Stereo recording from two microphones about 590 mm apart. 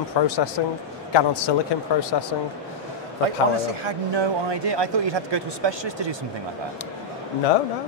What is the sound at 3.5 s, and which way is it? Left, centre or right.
A man's voice, right.